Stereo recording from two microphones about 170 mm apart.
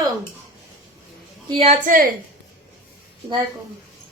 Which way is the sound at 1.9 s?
55° right (ahead or behind).